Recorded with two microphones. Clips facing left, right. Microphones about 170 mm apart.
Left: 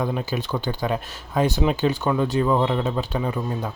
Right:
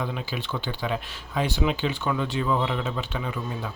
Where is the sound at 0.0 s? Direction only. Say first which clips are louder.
Left 6 dB; 45° left (ahead or behind).